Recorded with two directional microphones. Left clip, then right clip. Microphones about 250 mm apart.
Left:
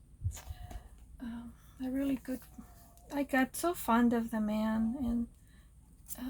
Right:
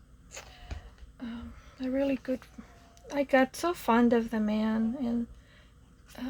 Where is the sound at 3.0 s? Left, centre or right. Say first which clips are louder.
Right 7 dB; right.